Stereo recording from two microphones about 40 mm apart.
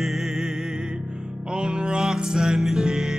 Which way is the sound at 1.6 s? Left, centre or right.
Right.